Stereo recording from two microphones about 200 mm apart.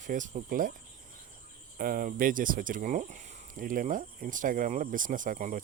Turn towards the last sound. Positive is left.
turn(degrees=-40)  # may be behind; listen again after turning